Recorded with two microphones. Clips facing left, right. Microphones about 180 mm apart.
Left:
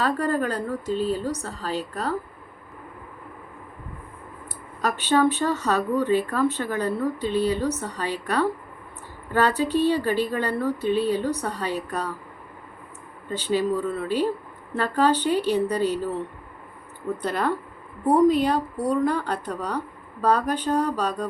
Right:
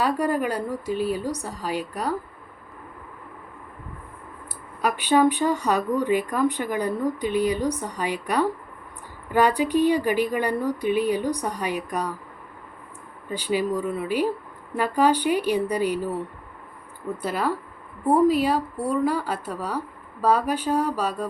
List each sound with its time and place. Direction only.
0.0 s speech: 10° right (ahead or behind)
4.8 s speech: 10° right (ahead or behind)
13.3 s speech: 10° right (ahead or behind)
17.2 s speech: 5° right (ahead or behind)